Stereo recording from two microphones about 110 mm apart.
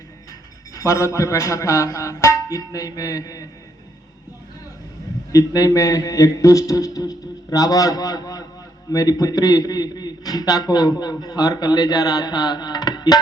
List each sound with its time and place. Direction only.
0.7 s speech: 30° left (ahead or behind)
5.3 s a man's voice: 35° left (ahead or behind)